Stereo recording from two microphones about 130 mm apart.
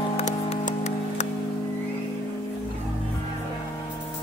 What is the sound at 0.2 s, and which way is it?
Music, 65° left (ahead or behind).